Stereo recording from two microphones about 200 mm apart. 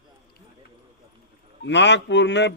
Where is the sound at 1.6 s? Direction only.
60° left (ahead or behind).